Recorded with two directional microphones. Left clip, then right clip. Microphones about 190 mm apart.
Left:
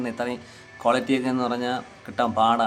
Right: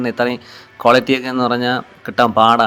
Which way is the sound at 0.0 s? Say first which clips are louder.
Right 10 dB; 30° right (ahead or behind).